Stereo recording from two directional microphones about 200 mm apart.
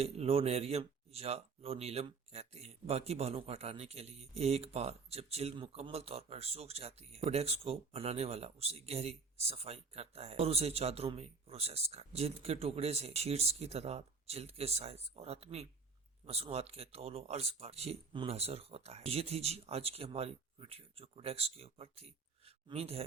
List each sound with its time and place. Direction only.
0.0 s speech: 30° right (ahead or behind)